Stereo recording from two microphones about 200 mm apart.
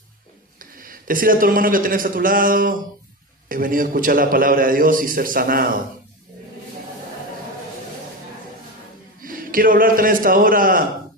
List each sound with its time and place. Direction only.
0.6 s a man's voice: 45° right (ahead or behind)
9.2 s a man's voice: 45° right (ahead or behind)